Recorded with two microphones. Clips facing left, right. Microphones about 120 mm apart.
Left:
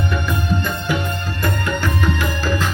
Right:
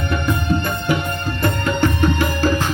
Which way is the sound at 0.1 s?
55° right (ahead or behind).